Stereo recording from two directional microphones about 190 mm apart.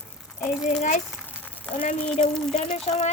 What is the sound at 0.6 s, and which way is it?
Speech, 40° left (ahead or behind).